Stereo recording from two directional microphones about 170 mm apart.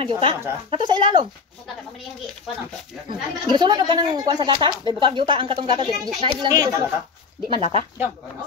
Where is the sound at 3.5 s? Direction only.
25° right (ahead or behind).